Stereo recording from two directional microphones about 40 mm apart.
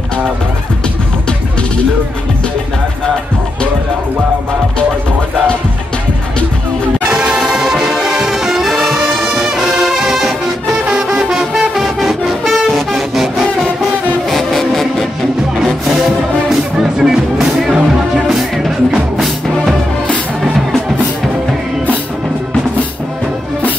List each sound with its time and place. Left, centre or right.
7.1 s music: centre
8.7 s brass instrument: centre
9.0 s music: centre
16.4 s music: centre
19.1 s music: centre